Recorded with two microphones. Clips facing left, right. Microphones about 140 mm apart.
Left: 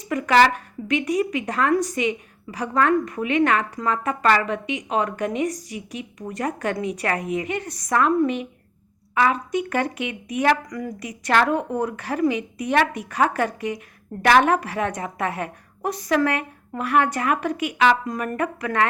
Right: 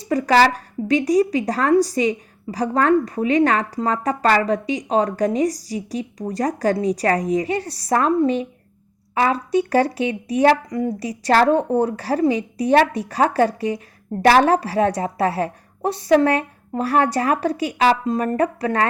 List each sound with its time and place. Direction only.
0.0 s speech: 35° right (ahead or behind)